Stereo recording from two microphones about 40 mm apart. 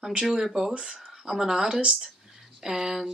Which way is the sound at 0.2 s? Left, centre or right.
Centre.